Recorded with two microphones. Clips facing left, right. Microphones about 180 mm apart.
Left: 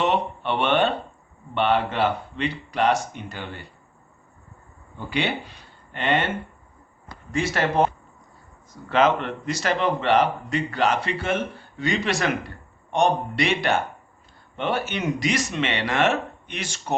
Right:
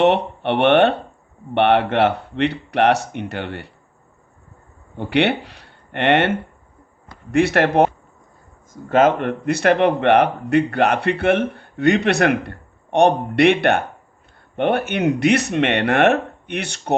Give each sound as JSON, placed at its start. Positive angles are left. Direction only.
{"t": 0.0, "sound": "speech", "side_deg": -65}
{"t": 4.9, "sound": "speech", "side_deg": -65}
{"t": 8.7, "sound": "speech", "side_deg": -50}